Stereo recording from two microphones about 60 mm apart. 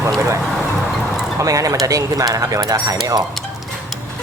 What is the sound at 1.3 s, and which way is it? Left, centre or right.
Speech, right.